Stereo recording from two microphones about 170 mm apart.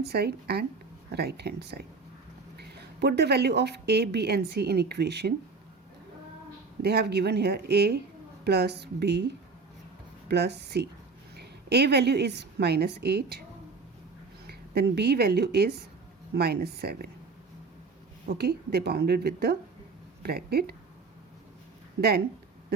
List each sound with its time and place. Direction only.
0.0 s a woman's voice: 70° right (ahead or behind)
6.8 s a woman's voice: 70° right (ahead or behind)
14.4 s a woman's voice: 65° right (ahead or behind)
18.3 s a woman's voice: 65° right (ahead or behind)